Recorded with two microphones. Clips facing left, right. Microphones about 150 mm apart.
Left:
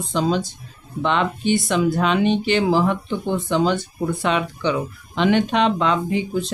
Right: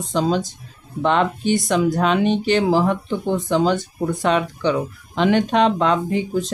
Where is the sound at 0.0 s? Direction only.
45° right (ahead or behind).